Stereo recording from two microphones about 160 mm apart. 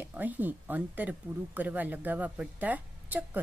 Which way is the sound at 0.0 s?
10° right (ahead or behind).